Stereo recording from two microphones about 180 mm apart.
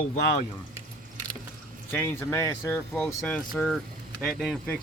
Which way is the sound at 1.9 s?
15° left (ahead or behind).